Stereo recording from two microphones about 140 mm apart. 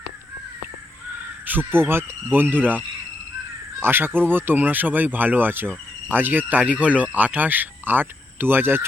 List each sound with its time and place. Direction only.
1.5 s speech: 15° right (ahead or behind)